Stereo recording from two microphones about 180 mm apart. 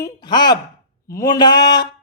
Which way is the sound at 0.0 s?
25° left (ahead or behind).